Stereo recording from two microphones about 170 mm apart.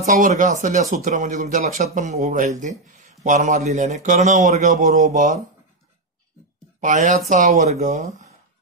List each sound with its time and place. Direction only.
0.0 s speech: 50° right (ahead or behind)
6.8 s speech: 45° right (ahead or behind)